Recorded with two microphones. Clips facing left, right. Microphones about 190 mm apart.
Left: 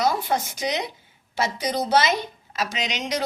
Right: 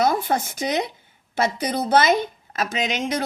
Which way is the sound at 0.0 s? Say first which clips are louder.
Right 2 dB; 50° right (ahead or behind).